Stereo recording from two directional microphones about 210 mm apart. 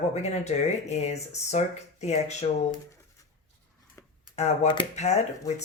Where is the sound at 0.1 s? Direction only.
30° left (ahead or behind).